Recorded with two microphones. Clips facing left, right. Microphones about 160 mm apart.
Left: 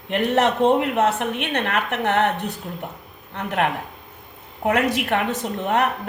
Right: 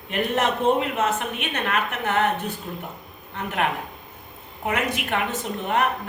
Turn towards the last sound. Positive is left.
turn(degrees=70)  # may be behind; listen again after turning